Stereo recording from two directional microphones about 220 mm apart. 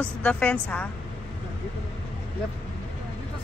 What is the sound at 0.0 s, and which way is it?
Speech, 5° left (ahead or behind).